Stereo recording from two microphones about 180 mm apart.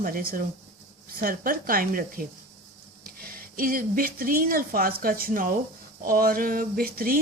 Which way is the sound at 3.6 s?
50° right (ahead or behind).